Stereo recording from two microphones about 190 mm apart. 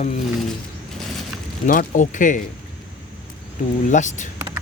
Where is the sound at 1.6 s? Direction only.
45° left (ahead or behind).